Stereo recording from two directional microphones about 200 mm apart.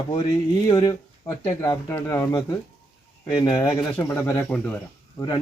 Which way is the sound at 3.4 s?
20° left (ahead or behind).